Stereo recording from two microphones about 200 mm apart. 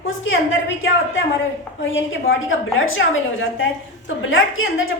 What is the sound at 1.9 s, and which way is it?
A woman's voice, 70° left (ahead or behind).